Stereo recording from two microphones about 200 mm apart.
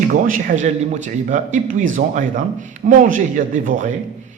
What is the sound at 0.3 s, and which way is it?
Speech, 40° right (ahead or behind).